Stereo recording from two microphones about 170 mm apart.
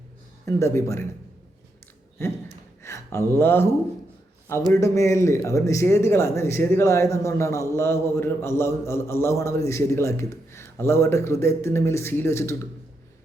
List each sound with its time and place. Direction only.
0.4 s speech: 15° left (ahead or behind)
2.2 s speech: 15° left (ahead or behind)
2.8 s a sound: 15° left (ahead or behind)
3.3 s speech: 15° left (ahead or behind)
4.7 s speech: 20° left (ahead or behind)